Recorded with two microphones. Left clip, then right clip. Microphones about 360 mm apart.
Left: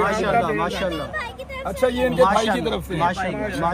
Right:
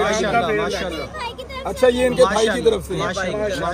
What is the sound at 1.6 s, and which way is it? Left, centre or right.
Speech, left.